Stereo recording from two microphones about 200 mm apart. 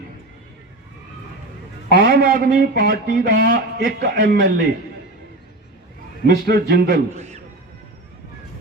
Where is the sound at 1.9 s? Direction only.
50° right (ahead or behind).